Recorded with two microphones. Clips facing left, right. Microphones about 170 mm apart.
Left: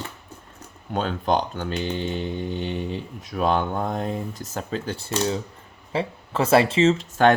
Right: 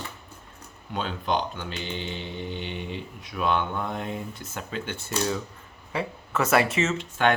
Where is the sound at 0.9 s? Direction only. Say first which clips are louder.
Left 5 dB; 45° left (ahead or behind).